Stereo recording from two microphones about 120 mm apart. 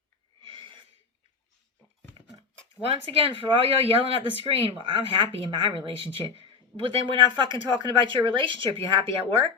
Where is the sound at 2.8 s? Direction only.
50° right (ahead or behind).